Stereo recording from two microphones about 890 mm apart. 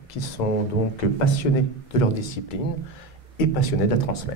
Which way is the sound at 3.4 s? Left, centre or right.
Left.